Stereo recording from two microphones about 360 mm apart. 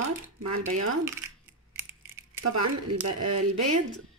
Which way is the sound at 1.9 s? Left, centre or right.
Centre.